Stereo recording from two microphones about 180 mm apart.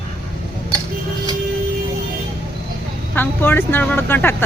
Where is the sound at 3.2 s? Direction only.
10° left (ahead or behind).